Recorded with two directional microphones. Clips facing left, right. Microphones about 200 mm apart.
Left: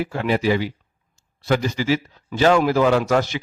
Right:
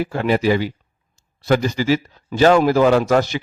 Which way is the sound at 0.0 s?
40° right (ahead or behind).